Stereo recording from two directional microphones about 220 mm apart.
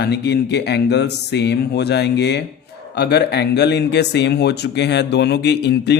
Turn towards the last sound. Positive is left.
turn(degrees=50)  # may be behind; listen again after turning